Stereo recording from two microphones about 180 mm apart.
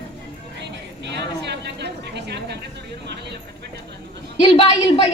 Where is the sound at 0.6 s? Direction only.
75° right (ahead or behind).